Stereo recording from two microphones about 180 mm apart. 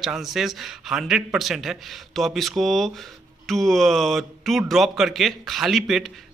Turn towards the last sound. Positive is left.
turn(degrees=0)  # may be behind; listen again after turning